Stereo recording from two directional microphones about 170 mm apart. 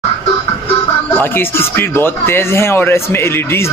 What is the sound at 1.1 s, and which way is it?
Speech, 10° left (ahead or behind).